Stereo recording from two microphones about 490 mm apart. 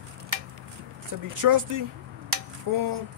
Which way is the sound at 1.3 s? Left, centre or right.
Right.